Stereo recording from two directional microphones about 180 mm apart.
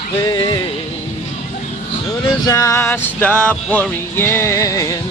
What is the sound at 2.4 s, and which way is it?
Music, 20° left (ahead or behind).